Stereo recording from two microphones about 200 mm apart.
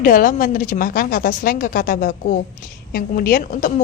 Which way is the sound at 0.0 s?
45° left (ahead or behind).